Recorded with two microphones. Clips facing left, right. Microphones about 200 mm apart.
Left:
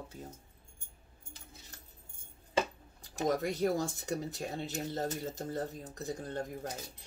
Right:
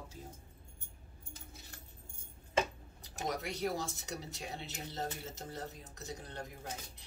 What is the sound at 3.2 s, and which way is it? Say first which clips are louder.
Speech: left 6 dB; 50° left (ahead or behind).